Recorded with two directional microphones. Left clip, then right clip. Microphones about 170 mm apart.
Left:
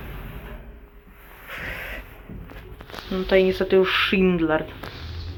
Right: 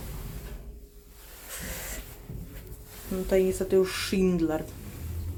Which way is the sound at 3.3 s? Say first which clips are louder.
Left 6 dB; 15° right (ahead or behind).